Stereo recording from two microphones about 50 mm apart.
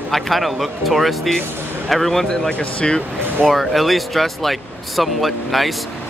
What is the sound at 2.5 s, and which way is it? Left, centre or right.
Speech, left.